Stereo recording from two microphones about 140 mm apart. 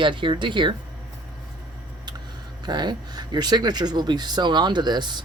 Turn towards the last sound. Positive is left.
turn(degrees=-30)  # may be behind; listen again after turning